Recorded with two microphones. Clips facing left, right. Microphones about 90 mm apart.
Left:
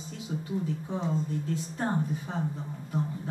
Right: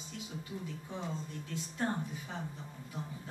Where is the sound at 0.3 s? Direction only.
35° left (ahead or behind).